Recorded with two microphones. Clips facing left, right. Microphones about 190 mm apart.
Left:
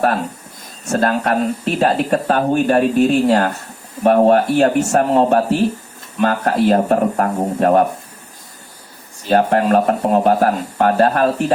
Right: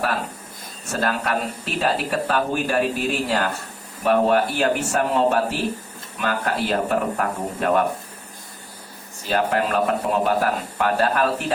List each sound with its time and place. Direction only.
0.9 s speech: 40° left (ahead or behind)
9.3 s speech: 40° left (ahead or behind)